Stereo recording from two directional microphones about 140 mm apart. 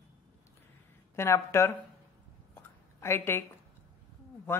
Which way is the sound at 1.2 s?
20° left (ahead or behind).